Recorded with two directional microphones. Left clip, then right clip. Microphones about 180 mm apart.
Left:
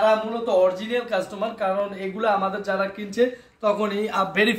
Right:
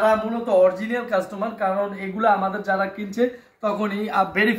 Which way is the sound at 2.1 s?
35° left (ahead or behind).